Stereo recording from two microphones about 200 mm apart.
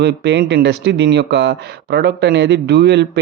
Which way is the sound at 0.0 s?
55° right (ahead or behind).